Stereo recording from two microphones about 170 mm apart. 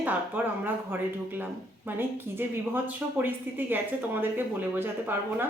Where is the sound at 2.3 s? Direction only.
10° right (ahead or behind).